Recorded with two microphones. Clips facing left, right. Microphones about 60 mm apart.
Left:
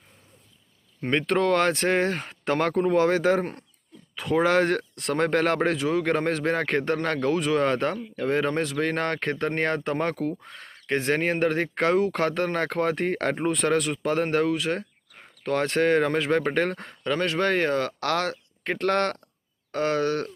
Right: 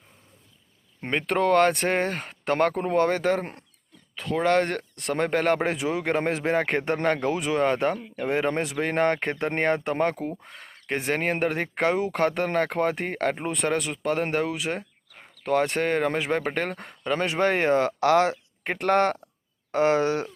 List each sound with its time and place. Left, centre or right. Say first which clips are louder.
1.1 s speech: right 1 dB; centre
17.1 s speech: even; centre